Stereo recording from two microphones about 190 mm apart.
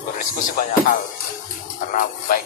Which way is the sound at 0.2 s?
45° left (ahead or behind).